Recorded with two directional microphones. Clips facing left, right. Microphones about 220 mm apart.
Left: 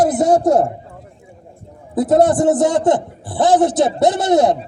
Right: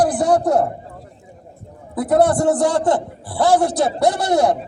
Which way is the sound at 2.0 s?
20° left (ahead or behind).